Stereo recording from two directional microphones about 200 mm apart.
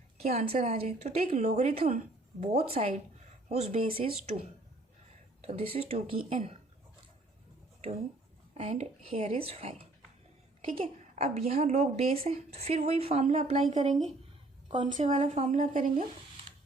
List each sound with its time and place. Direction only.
0.2 s a woman's voice: 30° right (ahead or behind)
5.4 s a woman's voice: 30° right (ahead or behind)
8.5 s a woman's voice: 35° right (ahead or behind)
14.9 s speech: 30° right (ahead or behind)